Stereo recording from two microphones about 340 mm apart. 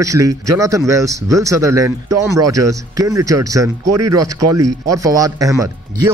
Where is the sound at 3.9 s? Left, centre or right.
Right.